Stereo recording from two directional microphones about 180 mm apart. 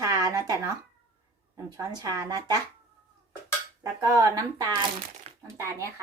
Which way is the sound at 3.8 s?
20° right (ahead or behind).